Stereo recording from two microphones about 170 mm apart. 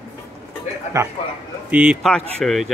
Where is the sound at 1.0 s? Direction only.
15° right (ahead or behind).